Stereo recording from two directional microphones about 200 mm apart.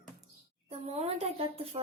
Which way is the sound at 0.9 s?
35° right (ahead or behind).